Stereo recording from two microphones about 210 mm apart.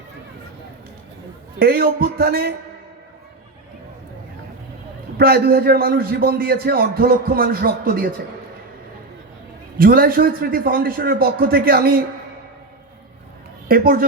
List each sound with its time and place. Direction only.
1.5 s a man's voice: 45° right (ahead or behind)
5.1 s a man's voice: 45° right (ahead or behind)
9.7 s a man's voice: 45° right (ahead or behind)
13.7 s a man's voice: 45° right (ahead or behind)